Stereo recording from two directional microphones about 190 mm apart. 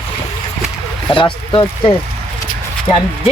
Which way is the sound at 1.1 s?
25° left (ahead or behind).